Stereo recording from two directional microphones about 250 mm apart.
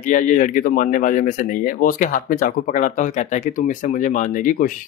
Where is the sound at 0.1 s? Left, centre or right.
Left.